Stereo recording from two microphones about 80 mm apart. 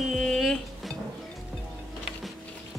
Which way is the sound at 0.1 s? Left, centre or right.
Centre.